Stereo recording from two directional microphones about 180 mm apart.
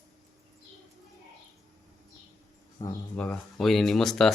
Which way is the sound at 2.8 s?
10° left (ahead or behind).